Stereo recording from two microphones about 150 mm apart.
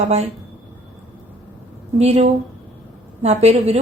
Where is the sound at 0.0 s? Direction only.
45° right (ahead or behind).